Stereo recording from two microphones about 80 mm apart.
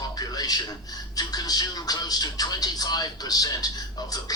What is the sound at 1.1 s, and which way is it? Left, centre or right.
Speech, left.